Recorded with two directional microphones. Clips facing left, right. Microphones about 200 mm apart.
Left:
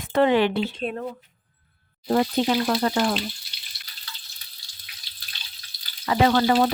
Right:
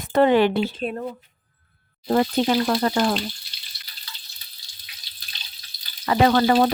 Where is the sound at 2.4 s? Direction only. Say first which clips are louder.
Right 1 dB; 55° right (ahead or behind).